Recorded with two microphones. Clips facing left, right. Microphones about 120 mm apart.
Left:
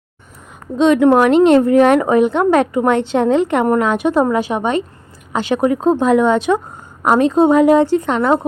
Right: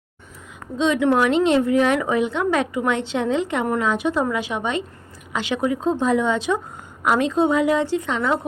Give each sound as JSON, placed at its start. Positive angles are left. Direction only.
{"t": 0.8, "sound": "a woman's voice", "side_deg": 55}
{"t": 7.0, "sound": "a woman's voice", "side_deg": 45}